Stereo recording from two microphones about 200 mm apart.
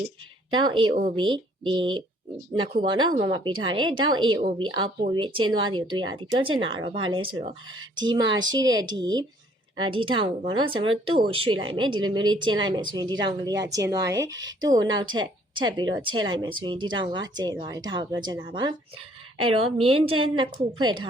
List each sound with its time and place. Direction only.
0.5 s speech: 25° right (ahead or behind)